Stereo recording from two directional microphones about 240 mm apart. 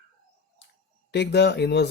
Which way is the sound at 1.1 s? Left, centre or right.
Left.